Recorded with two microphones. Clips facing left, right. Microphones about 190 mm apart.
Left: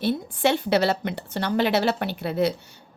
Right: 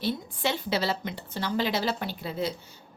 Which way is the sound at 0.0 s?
60° left (ahead or behind).